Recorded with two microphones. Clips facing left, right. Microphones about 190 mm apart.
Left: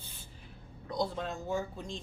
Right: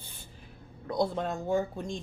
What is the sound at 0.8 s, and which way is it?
A woman's voice, 55° right (ahead or behind).